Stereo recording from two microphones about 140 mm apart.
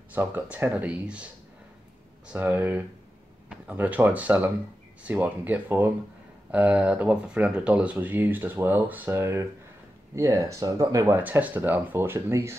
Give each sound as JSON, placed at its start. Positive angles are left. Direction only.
{"t": 0.1, "sound": "speech", "side_deg": -10}
{"t": 11.1, "sound": "speech", "side_deg": -10}